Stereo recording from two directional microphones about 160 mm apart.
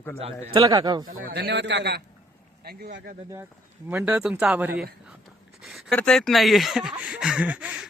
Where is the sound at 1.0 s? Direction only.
60° right (ahead or behind); by 2.0 s 90° right.